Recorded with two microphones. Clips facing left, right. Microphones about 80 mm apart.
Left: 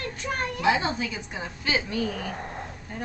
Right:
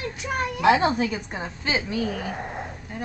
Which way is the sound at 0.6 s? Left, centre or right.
Right.